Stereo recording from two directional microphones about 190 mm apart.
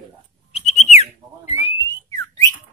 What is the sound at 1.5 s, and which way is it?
Whistling, 30° left (ahead or behind).